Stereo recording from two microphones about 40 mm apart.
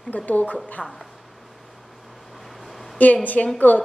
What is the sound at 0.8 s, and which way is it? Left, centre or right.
Speech, centre.